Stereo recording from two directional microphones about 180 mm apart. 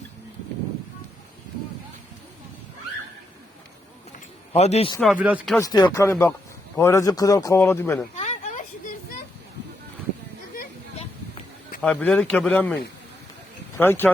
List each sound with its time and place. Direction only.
4.5 s speech: 35° left (ahead or behind)
5.1 s speech: 10° right (ahead or behind)
5.5 s a man's voice: 20° left (ahead or behind)
8.1 s a sound: 40° left (ahead or behind)
11.8 s a man's voice: 5° left (ahead or behind)